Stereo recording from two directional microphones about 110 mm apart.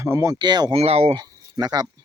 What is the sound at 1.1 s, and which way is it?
Speech, 40° right (ahead or behind).